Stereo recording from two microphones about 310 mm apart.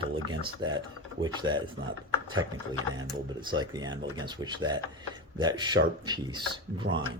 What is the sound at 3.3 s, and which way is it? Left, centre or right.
Speech, centre.